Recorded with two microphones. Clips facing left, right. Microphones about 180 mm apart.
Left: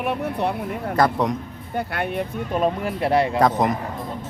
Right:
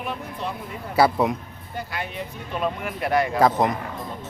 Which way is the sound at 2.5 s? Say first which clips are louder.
Left 5 dB; 35° left (ahead or behind).